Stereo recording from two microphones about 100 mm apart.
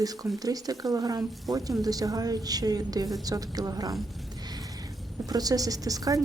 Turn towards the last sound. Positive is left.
turn(degrees=-35)  # may be behind; listen again after turning